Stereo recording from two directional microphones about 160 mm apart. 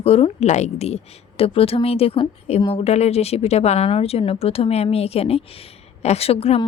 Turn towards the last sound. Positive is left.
turn(degrees=40)  # may be behind; listen again after turning